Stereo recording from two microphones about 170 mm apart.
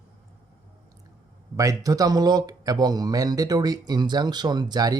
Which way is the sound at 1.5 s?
20° right (ahead or behind).